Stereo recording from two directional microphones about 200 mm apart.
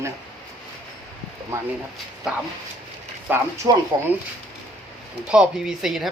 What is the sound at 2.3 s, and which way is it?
Speech, 5° right (ahead or behind).